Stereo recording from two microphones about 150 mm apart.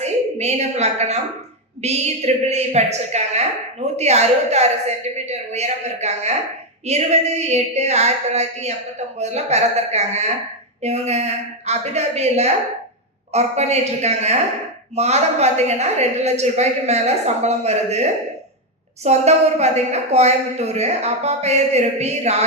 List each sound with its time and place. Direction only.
0.0 s a woman's voice: 45° right (ahead or behind)